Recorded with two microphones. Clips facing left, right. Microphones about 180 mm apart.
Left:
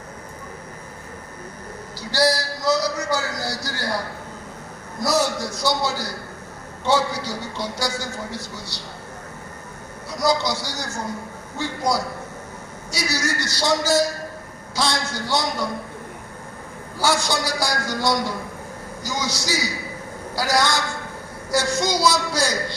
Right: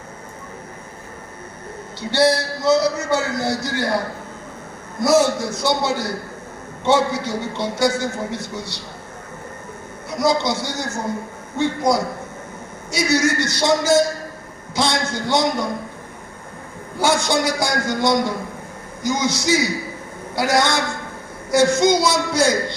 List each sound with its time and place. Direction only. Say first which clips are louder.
2.0 s a man's voice: right 4 dB; 25° right (ahead or behind)
10.1 s a man's voice: right 3 dB; 25° right (ahead or behind)
17.0 s a man's voice: right 4 dB; 20° right (ahead or behind)